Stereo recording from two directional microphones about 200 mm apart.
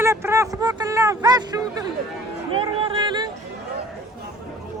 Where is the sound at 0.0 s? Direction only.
15° right (ahead or behind).